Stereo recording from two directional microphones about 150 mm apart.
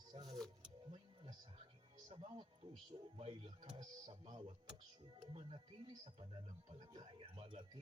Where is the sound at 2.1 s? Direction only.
35° right (ahead or behind).